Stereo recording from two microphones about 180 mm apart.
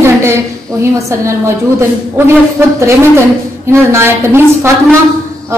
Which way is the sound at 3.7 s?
15° right (ahead or behind).